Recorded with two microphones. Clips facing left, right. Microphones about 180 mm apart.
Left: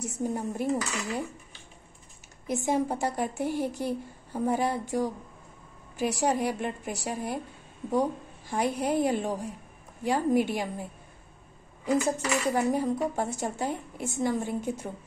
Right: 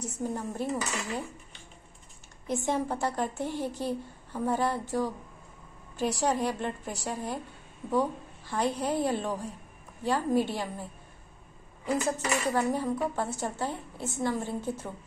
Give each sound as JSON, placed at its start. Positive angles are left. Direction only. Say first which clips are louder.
{"t": 0.0, "sound": "speech", "louder": "left 2 dB", "side_deg": 15}
{"t": 2.4, "sound": "a woman's voice", "louder": "left 2 dB", "side_deg": 10}